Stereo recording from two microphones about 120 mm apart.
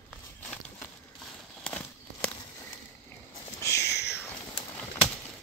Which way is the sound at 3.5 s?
25° left (ahead or behind).